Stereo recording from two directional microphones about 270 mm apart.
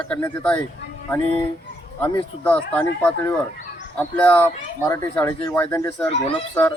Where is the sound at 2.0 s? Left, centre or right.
Centre.